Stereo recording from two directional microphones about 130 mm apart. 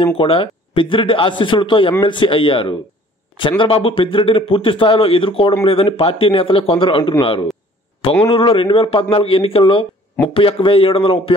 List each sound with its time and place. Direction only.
0.0 s a man's voice: 45° left (ahead or behind)